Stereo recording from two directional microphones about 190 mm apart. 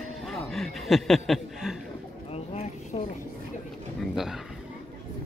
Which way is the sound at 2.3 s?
30° left (ahead or behind).